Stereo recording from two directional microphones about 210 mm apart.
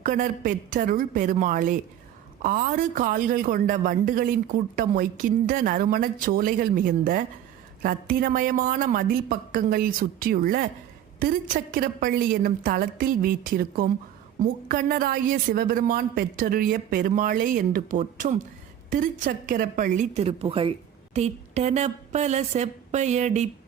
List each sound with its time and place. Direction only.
0.0 s a woman's voice: 40° right (ahead or behind)
5.5 s a woman's voice: 40° right (ahead or behind)